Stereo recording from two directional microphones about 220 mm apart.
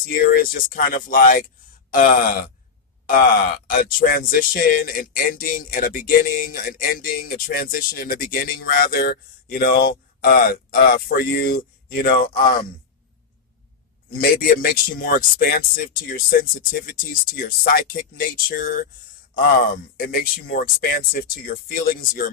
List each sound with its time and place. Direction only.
0.1 s speech: 40° left (ahead or behind)
14.1 s speech: 40° left (ahead or behind)